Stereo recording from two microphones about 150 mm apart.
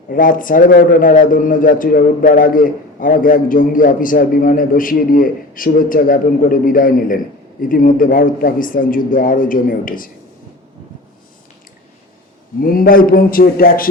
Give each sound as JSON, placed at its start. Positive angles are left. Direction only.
{"t": 0.1, "sound": "a man's voice", "side_deg": 65}
{"t": 12.6, "sound": "speech", "side_deg": 70}